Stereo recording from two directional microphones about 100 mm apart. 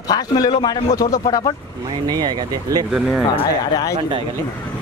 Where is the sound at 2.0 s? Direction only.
45° right (ahead or behind).